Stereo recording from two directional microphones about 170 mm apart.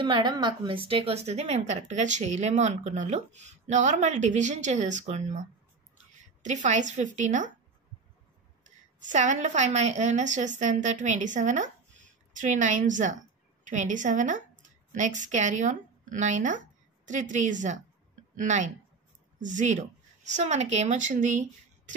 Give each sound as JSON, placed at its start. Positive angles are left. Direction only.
{"t": 0.0, "sound": "a woman's voice", "side_deg": -25}
{"t": 6.4, "sound": "a woman's voice", "side_deg": -45}
{"t": 8.6, "sound": "a woman's voice", "side_deg": -45}